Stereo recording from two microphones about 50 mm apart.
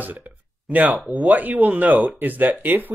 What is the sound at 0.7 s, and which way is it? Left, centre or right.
Speech, right.